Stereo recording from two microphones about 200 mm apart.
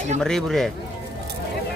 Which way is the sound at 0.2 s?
Centre (ahead or behind).